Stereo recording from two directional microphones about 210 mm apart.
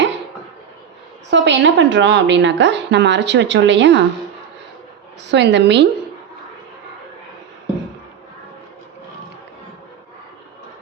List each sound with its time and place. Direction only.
1.3 s a woman's voice: 60° right (ahead or behind)
5.3 s a woman's voice: 55° right (ahead or behind)